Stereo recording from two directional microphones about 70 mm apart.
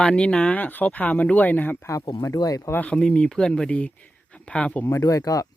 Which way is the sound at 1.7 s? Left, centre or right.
Left.